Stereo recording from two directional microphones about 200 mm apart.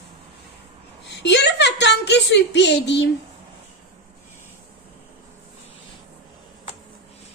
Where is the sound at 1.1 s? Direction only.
60° left (ahead or behind).